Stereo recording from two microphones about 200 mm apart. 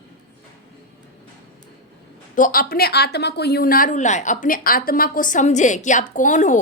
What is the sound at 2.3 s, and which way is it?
A woman's voice, 45° left (ahead or behind).